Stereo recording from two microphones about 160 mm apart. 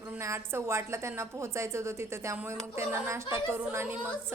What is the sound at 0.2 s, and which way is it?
A woman's voice, 15° right (ahead or behind).